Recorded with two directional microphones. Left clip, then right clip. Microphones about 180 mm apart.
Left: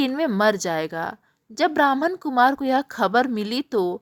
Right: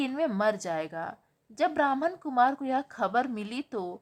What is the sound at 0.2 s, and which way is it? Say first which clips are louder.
A woman's voice: left 6 dB; 30° left (ahead or behind).